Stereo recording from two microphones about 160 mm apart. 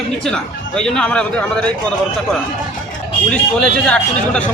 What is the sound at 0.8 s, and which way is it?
Speech, 5° left (ahead or behind).